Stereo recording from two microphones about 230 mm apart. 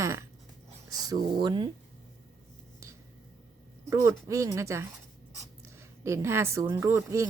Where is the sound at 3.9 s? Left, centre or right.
Centre.